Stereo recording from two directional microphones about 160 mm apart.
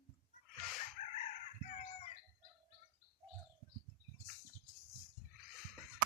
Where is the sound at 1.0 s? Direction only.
45° left (ahead or behind).